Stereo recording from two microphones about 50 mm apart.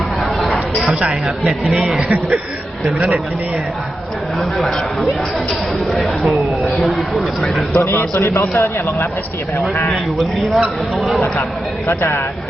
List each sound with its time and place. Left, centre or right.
2.0 s speech: right
5.9 s a man's voice: centre
8.1 s a man's voice: left
9.9 s a man's voice: centre
11.9 s speech: left